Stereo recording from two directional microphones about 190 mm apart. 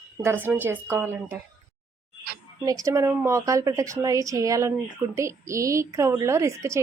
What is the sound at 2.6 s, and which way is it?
A woman's voice, 15° right (ahead or behind).